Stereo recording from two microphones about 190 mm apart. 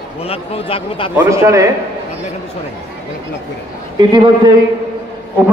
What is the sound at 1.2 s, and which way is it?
Speech, 15° right (ahead or behind).